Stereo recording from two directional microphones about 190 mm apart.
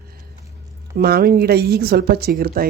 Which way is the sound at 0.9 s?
50° right (ahead or behind).